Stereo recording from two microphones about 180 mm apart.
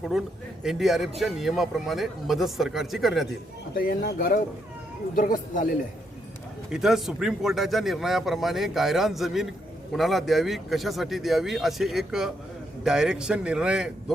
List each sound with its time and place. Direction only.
0.0 s a man's voice: centre (ahead or behind)
3.8 s speech: 55° left (ahead or behind)
6.7 s a man's voice: centre (ahead or behind)